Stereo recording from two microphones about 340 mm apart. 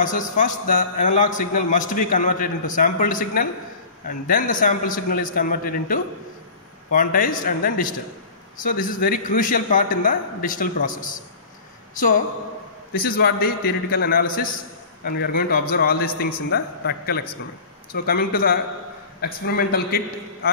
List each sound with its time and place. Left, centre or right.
0.0 s a man's voice: left
12.9 s a man's voice: left